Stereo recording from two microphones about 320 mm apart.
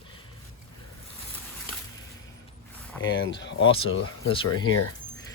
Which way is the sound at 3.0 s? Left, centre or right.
Left.